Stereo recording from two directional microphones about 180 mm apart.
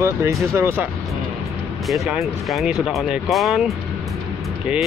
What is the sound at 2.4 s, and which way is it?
Speech, centre (ahead or behind).